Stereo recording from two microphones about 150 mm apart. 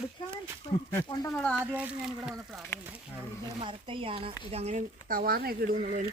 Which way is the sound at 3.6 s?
35° right (ahead or behind).